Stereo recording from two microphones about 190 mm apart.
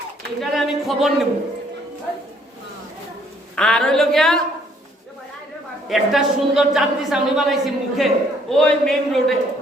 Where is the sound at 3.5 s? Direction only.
5° left (ahead or behind).